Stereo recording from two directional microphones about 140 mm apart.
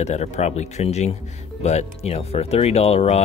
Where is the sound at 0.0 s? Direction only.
50° left (ahead or behind).